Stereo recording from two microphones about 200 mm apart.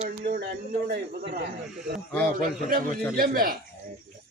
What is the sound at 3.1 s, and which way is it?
Speech, 45° right (ahead or behind).